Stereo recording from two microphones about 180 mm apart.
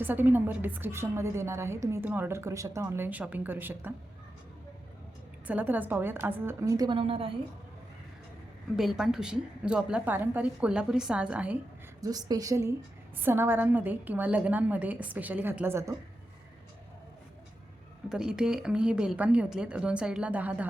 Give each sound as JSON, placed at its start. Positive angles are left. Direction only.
{"t": 0.0, "sound": "a woman's voice", "side_deg": -10}
{"t": 5.5, "sound": "a woman's voice", "side_deg": -10}
{"t": 8.7, "sound": "a woman's voice", "side_deg": 0}
{"t": 11.9, "sound": "a woman's voice", "side_deg": -20}
{"t": 18.1, "sound": "a woman's voice", "side_deg": -5}